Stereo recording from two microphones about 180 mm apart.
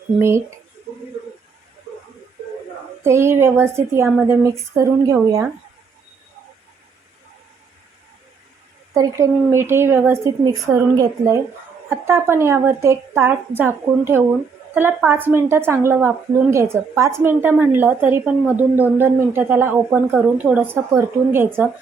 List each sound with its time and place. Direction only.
0.2 s a woman's voice: 15° right (ahead or behind)
3.0 s a woman's voice: 15° right (ahead or behind)
8.9 s a woman's voice: 15° right (ahead or behind)